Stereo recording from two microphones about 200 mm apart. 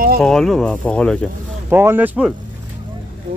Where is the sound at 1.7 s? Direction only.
10° right (ahead or behind).